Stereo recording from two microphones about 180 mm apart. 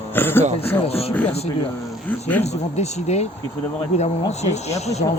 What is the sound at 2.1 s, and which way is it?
Speech, 10° left (ahead or behind).